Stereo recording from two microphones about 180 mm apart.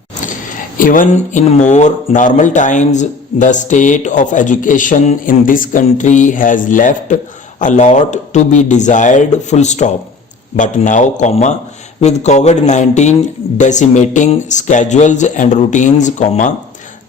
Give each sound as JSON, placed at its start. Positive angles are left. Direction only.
{"t": 0.8, "sound": "speech", "side_deg": 50}